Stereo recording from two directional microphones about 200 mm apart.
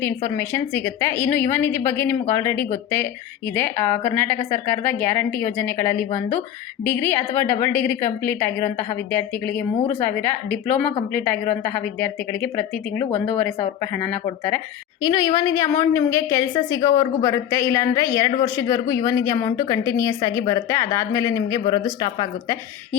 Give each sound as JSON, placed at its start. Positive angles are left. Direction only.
{"t": 0.0, "sound": "a woman's voice", "side_deg": 10}
{"t": 15.0, "sound": "a woman's voice", "side_deg": 20}